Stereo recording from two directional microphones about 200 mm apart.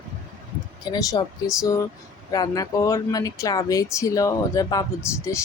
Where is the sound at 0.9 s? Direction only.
20° left (ahead or behind).